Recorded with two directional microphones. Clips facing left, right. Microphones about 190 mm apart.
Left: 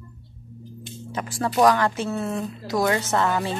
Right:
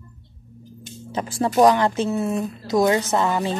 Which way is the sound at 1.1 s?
25° right (ahead or behind).